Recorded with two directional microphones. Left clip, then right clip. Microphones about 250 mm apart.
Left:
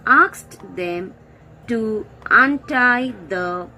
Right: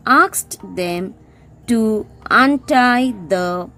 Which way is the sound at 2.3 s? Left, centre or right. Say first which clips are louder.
Right 2 dB; right.